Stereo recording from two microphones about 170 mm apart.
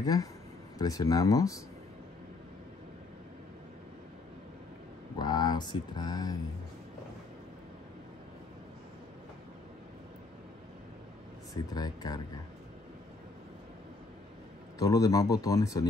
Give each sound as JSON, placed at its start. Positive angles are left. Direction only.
{"t": 0.0, "sound": "speech", "side_deg": 20}
{"t": 5.2, "sound": "speech", "side_deg": 25}
{"t": 11.5, "sound": "speech", "side_deg": 25}
{"t": 14.8, "sound": "speech", "side_deg": 20}